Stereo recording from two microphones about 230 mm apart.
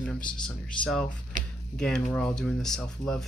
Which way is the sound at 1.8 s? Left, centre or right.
Centre.